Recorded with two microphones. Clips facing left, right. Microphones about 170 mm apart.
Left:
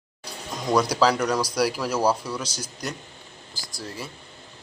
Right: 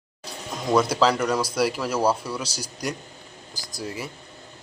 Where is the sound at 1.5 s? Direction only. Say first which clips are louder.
Even; centre (ahead or behind).